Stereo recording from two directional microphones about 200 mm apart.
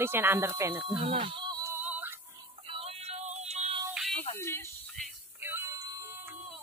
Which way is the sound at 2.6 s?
30° right (ahead or behind).